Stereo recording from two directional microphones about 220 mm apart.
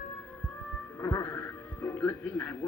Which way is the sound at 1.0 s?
15° left (ahead or behind).